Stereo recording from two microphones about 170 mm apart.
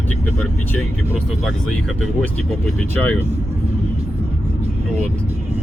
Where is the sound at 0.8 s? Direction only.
Centre (ahead or behind).